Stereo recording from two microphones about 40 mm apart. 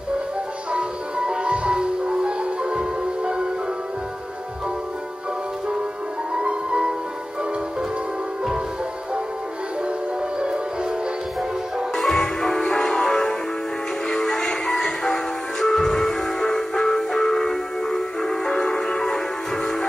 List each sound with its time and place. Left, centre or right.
0.7 s music: right
6.4 s music: right
12.0 s music: centre